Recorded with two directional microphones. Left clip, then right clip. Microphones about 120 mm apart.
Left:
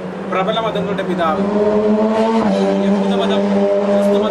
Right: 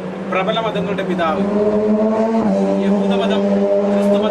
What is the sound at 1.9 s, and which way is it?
Music, 45° left (ahead or behind).